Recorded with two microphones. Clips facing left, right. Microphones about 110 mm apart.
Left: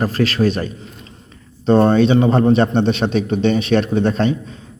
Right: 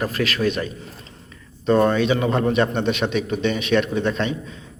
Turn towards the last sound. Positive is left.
turn(degrees=35)  # may be behind; listen again after turning